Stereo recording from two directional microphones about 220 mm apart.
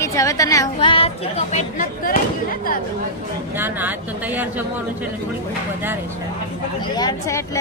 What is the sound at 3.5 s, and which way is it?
Speech, 10° right (ahead or behind).